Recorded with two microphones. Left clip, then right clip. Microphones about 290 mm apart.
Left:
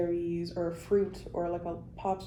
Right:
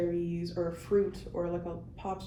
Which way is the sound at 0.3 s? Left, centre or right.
Centre.